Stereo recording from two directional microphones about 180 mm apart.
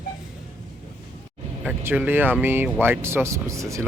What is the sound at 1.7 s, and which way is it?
Speech, 10° right (ahead or behind).